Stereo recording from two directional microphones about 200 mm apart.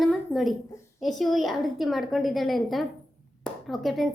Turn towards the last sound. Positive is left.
turn(degrees=0)  # may be behind; listen again after turning